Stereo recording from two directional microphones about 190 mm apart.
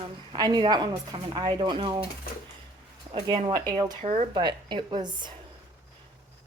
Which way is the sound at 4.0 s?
35° right (ahead or behind).